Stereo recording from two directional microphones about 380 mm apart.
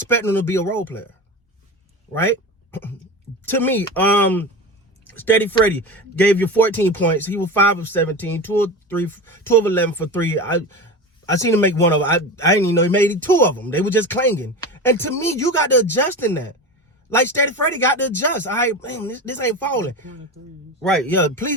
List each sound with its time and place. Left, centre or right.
0.3 s speech: centre
3.4 s speech: centre